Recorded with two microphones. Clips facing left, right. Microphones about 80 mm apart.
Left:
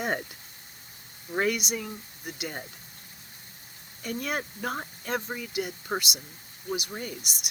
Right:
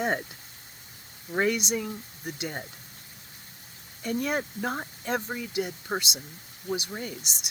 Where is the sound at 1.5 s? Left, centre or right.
Right.